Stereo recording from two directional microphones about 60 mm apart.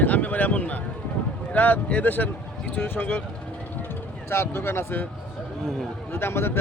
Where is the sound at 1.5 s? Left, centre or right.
Left.